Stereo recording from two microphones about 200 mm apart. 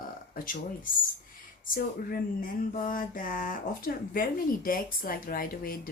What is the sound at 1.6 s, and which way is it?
Speech, 45° left (ahead or behind).